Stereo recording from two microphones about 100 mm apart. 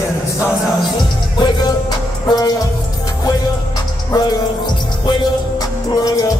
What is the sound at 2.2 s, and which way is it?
Music, 40° left (ahead or behind).